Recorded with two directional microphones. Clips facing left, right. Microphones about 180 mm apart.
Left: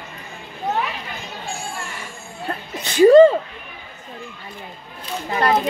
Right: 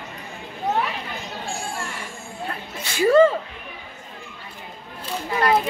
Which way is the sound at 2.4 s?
25° left (ahead or behind).